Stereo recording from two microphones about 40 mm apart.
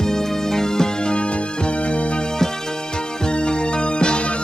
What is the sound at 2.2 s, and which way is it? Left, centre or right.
Music, centre.